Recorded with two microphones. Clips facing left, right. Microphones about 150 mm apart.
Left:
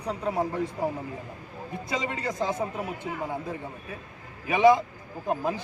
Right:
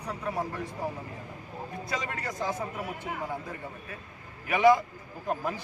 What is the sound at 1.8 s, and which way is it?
Speech, 20° left (ahead or behind).